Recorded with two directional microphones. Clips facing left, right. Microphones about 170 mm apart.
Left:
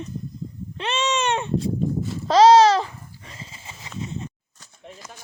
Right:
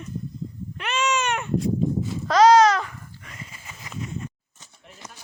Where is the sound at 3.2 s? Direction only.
25° left (ahead or behind).